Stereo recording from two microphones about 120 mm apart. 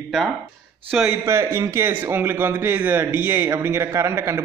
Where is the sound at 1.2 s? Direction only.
25° right (ahead or behind).